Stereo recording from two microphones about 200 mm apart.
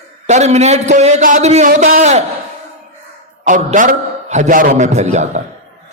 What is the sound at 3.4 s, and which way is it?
A man's voice, 30° right (ahead or behind).